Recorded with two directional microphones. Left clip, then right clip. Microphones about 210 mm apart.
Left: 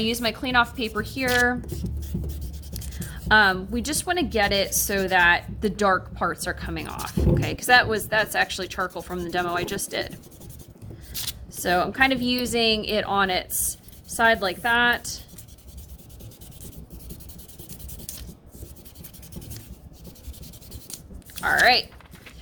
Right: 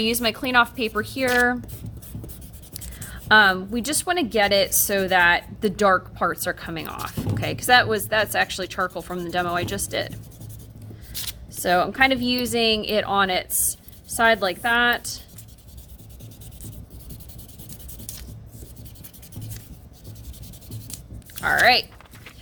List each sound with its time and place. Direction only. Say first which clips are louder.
0.0 s a woman's voice: right 3 dB; 20° right (ahead or behind)
2.7 s speech: even; 15° right (ahead or behind)
11.1 s shuffling cards: even; centre (ahead or behind)
11.6 s speech: right 2 dB; 15° right (ahead or behind)
21.6 s speech: right 1 dB; 20° right (ahead or behind)